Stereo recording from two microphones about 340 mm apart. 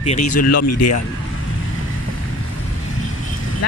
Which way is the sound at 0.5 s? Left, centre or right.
Left.